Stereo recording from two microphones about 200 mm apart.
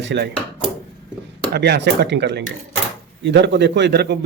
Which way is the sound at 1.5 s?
55° right (ahead or behind).